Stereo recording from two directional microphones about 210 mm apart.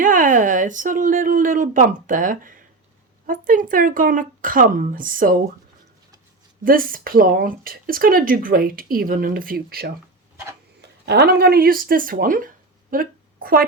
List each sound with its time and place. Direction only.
0.0 s speech: 40° right (ahead or behind)
6.7 s speech: 40° right (ahead or behind)
12.9 s a sound: 45° right (ahead or behind)